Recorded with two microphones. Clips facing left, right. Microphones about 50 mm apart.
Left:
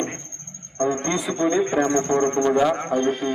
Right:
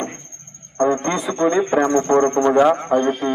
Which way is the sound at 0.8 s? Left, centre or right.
Centre.